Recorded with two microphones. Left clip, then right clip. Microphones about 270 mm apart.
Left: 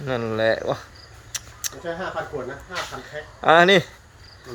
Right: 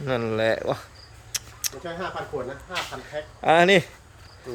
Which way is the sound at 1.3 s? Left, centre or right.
Centre.